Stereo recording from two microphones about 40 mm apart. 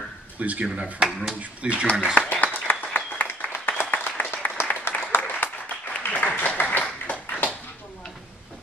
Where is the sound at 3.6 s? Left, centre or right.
Left.